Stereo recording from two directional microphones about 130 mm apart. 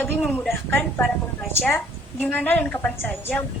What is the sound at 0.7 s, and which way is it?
Speech, 15° left (ahead or behind).